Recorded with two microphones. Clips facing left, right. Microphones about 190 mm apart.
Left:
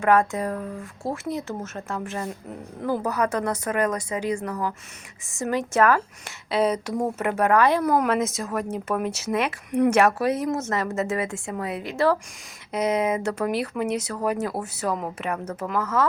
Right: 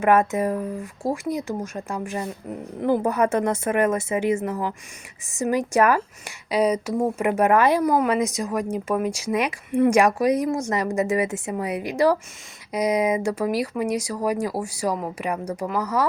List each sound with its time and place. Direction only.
0.0 s a woman's voice: 20° right (ahead or behind)